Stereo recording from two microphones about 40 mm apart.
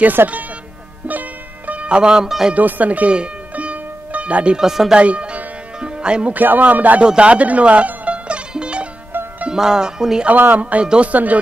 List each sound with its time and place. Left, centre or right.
0.0 s speech: right
1.0 s music: right
2.2 s speech: centre
2.5 s speech: right
3.1 s music: right
4.6 s speech: centre
4.9 s music: right
6.3 s music: right
7.0 s music: right
9.1 s music: right
9.5 s speech: centre
10.6 s speech: right